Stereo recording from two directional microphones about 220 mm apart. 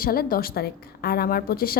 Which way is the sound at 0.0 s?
40° left (ahead or behind).